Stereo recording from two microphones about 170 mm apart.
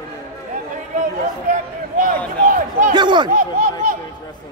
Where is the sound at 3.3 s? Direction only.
50° right (ahead or behind).